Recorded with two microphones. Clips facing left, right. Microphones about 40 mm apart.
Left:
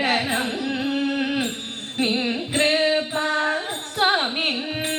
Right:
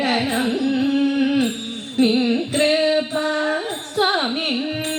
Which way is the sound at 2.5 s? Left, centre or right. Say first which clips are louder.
Even; left.